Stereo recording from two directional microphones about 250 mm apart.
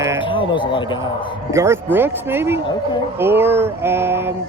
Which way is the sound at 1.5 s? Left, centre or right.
Centre.